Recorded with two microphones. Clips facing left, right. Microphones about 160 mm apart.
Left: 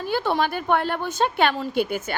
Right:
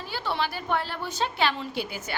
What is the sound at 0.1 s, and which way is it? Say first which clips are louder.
A woman's voice: left 7 dB; 50° left (ahead or behind).